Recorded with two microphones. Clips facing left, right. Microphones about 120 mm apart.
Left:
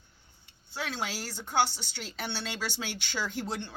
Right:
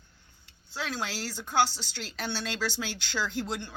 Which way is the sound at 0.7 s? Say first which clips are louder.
Right 1 dB; 20° left (ahead or behind).